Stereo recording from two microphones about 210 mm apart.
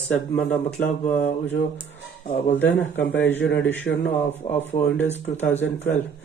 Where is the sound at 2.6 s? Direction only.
10° left (ahead or behind).